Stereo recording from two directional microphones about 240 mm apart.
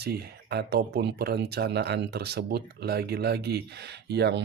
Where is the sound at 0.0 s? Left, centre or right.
Right.